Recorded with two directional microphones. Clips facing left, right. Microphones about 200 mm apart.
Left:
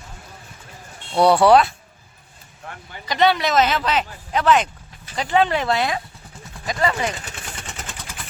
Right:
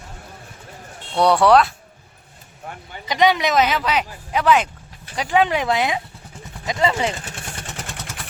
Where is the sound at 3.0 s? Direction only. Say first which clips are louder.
Right 1 dB; 15° right (ahead or behind).